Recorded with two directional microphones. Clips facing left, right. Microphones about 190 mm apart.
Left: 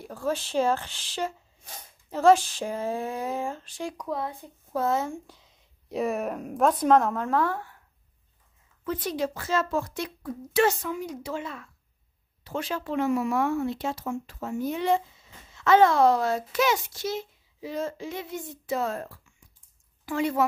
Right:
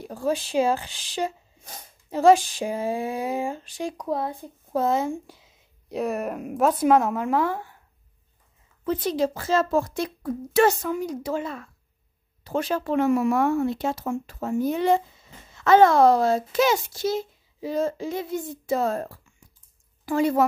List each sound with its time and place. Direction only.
0.0 s speech: 15° right (ahead or behind)
4.0 s a child's voice: 35° right (ahead or behind)
4.7 s speech: 15° right (ahead or behind)
5.9 s speech: centre (ahead or behind)
8.8 s a child's voice: 25° right (ahead or behind)